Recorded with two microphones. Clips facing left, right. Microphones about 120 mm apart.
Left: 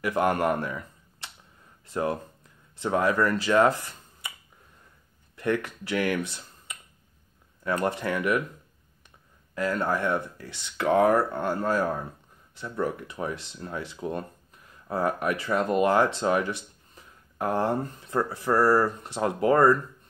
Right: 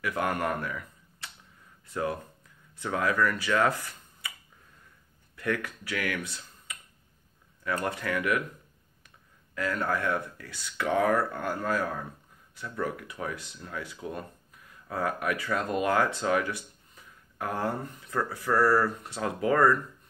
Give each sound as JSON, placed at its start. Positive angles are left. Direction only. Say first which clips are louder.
{"t": 0.0, "sound": "speech", "louder": "left 5 dB", "side_deg": 30}
{"t": 5.3, "sound": "speech", "louder": "left 4 dB", "side_deg": 20}
{"t": 9.6, "sound": "speech", "louder": "left 3 dB", "side_deg": 30}